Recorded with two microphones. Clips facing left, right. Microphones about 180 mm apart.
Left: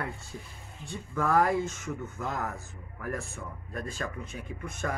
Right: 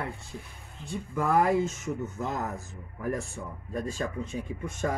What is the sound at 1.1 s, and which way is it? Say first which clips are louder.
Speech: right 1 dB; 15° right (ahead or behind).